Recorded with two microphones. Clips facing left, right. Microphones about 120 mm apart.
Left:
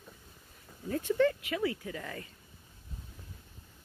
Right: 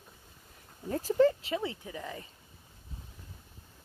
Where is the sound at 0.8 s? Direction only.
35° right (ahead or behind); by 2.2 s 15° right (ahead or behind).